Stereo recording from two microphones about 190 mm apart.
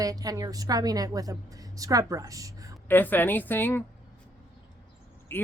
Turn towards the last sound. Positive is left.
turn(degrees=10)  # may be behind; listen again after turning